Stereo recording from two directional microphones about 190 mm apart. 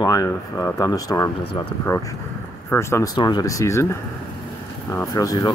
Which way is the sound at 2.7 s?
15° left (ahead or behind).